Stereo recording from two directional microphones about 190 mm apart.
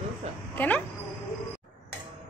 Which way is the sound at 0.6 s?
10° left (ahead or behind).